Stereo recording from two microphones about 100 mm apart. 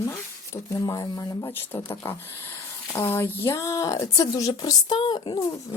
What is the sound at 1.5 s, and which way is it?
Speech, 20° left (ahead or behind).